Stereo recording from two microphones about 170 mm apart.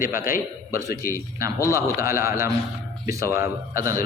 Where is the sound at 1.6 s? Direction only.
15° right (ahead or behind).